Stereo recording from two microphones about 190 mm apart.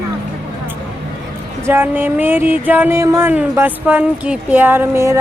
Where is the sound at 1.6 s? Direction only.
10° right (ahead or behind).